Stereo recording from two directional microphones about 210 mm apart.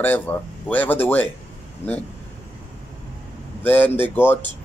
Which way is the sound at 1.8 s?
30° left (ahead or behind).